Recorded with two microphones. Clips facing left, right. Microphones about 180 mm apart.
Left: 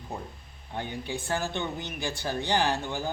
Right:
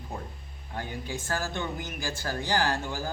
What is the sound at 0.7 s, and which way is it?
Speech, 25° left (ahead or behind).